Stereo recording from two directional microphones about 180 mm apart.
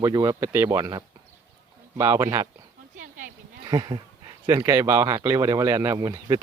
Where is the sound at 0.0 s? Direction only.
20° right (ahead or behind).